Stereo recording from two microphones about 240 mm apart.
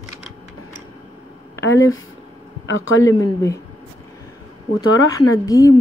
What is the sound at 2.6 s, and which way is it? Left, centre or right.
Speech, left.